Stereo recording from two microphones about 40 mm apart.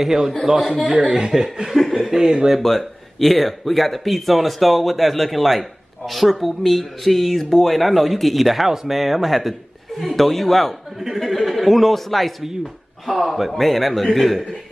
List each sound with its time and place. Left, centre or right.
0.0 s speech: centre
0.8 s speech: right
2.5 s speech: centre